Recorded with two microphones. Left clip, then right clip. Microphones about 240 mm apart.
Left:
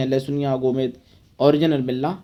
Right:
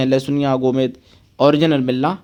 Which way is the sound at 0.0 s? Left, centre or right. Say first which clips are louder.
Right 5 dB; right.